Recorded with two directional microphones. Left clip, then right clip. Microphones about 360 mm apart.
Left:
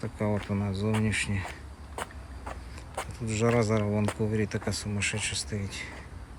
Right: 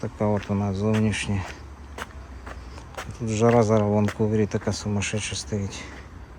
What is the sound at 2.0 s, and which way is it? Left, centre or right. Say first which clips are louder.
Vehicle: right 1 dB; centre.